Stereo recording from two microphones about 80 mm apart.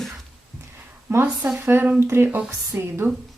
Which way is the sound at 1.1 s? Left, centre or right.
Right.